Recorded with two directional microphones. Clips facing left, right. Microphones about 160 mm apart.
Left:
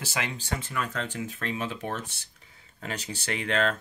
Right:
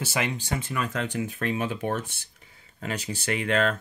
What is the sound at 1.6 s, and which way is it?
Speech, 50° right (ahead or behind).